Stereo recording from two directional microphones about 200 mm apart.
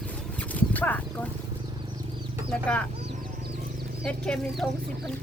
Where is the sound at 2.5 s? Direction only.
5° left (ahead or behind).